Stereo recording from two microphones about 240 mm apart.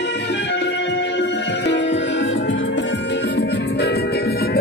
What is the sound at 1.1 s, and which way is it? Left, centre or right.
Music, left.